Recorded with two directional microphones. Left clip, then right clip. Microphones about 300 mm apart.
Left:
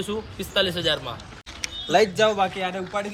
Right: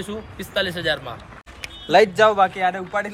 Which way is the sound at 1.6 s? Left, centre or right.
Centre.